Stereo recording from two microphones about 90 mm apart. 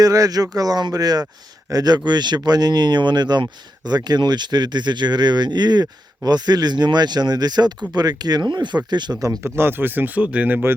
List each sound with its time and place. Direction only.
0.0 s speech: 40° right (ahead or behind)
9.4 s speech: 25° right (ahead or behind)